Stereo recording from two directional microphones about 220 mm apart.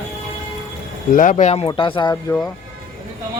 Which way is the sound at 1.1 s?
35° left (ahead or behind).